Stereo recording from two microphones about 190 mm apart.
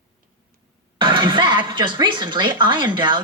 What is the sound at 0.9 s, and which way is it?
Speech, 25° right (ahead or behind).